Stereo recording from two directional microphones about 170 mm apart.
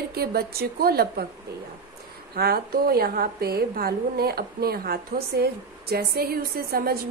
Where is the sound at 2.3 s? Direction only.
65° right (ahead or behind).